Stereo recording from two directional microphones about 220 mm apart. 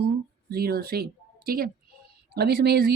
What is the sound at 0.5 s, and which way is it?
A woman's voice, 45° right (ahead or behind).